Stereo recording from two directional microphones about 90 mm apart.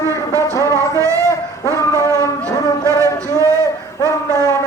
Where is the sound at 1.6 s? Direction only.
35° left (ahead or behind).